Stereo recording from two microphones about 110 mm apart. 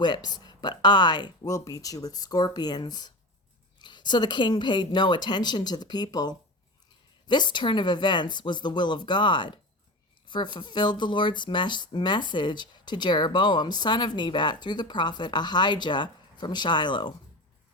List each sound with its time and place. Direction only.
0.0 s speech: 40° left (ahead or behind)